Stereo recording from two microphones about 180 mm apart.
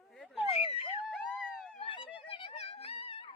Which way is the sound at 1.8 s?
30° left (ahead or behind).